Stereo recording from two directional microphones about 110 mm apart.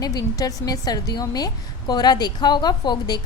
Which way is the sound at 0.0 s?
35° left (ahead or behind).